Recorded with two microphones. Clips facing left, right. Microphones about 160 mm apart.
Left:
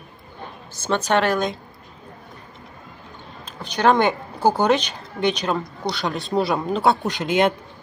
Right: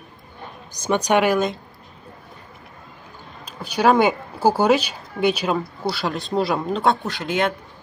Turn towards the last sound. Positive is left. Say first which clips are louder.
# left 3 dB
turn(degrees=20)  # may be behind; listen again after turning